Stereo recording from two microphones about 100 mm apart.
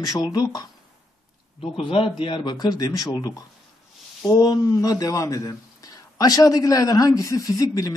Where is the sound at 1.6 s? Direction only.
65° left (ahead or behind).